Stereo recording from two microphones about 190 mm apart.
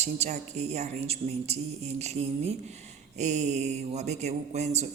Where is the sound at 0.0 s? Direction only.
35° right (ahead or behind).